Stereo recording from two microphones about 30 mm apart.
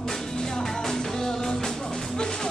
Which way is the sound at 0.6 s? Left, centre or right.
Centre.